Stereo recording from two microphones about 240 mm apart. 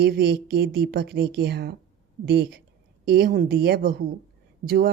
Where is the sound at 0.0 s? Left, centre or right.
Right.